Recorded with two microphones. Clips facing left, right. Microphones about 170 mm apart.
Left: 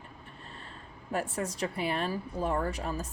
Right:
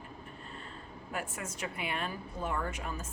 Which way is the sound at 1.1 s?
35° left (ahead or behind).